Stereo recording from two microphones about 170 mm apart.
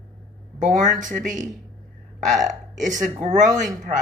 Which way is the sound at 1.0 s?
45° right (ahead or behind).